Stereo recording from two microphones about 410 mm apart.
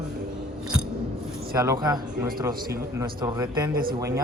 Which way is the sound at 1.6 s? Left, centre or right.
Centre.